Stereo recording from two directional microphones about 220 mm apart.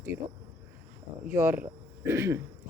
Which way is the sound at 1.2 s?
10° right (ahead or behind).